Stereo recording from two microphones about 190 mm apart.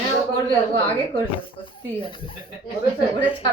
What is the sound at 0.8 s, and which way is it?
Speech, 10° left (ahead or behind).